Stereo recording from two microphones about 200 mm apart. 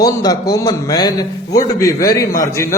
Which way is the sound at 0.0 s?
20° left (ahead or behind).